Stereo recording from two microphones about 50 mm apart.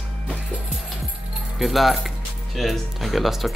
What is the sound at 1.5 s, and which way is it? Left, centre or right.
Speech, centre.